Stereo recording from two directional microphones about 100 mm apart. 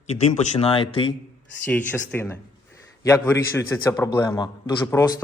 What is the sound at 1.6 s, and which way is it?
A man's voice, 15° left (ahead or behind).